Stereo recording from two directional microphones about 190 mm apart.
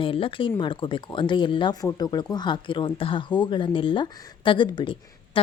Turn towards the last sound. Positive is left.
turn(degrees=25)  # may be behind; listen again after turning